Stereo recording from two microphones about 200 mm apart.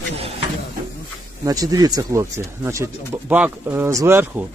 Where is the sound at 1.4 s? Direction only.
20° right (ahead or behind).